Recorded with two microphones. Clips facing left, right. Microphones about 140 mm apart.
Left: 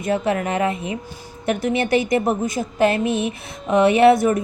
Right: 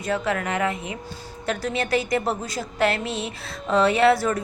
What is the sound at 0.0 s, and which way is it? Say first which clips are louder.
A woman's voice: left 4 dB; 25° left (ahead or behind).